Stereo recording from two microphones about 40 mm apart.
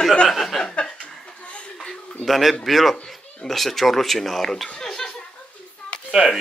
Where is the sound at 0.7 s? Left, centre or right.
Left.